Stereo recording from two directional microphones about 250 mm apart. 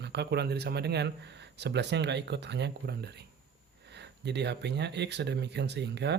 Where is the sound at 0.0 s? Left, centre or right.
Right.